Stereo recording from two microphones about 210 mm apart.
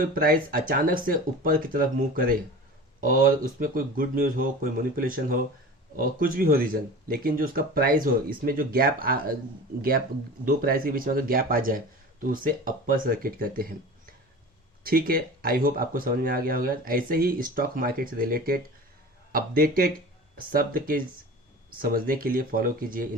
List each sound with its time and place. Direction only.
0.0 s speech: 45° right (ahead or behind)
10.4 s speech: 45° right (ahead or behind)
14.8 s speech: 45° right (ahead or behind)